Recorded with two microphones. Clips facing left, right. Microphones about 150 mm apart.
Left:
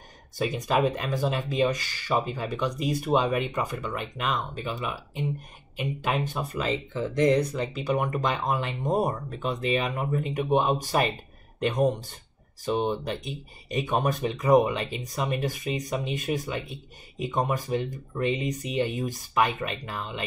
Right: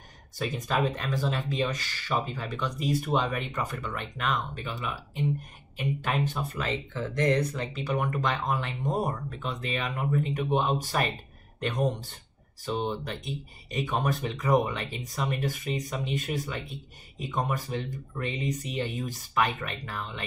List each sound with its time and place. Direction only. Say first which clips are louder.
0.4 s speech: left 4 dB; 15° left (ahead or behind)
12.6 s speech: left 4 dB; 15° left (ahead or behind)